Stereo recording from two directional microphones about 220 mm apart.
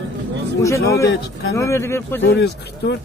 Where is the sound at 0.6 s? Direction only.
15° left (ahead or behind).